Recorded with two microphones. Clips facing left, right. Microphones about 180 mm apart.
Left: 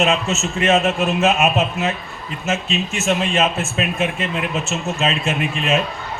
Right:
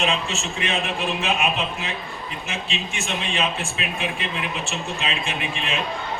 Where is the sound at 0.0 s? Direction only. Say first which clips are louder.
Left 6 dB; 40° left (ahead or behind).